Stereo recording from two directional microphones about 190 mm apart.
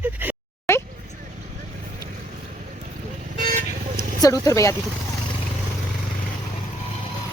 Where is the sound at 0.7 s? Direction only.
15° left (ahead or behind).